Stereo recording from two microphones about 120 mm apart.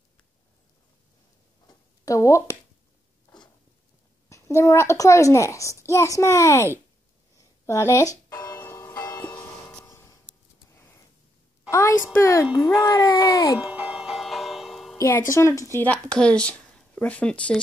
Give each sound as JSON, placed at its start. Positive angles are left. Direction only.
{"t": 1.7, "sound": "a sound", "side_deg": 25}
{"t": 4.3, "sound": "a child's voice", "side_deg": 25}
{"t": 7.3, "sound": "music", "side_deg": 25}
{"t": 8.5, "sound": "church bell", "side_deg": 25}
{"t": 9.2, "sound": "church bell", "side_deg": 15}
{"t": 9.8, "sound": "a sound", "side_deg": 25}
{"t": 11.7, "sound": "a woman's voice", "side_deg": 20}
{"t": 13.6, "sound": "a sound", "side_deg": -10}
{"t": 15.0, "sound": "speech", "side_deg": 25}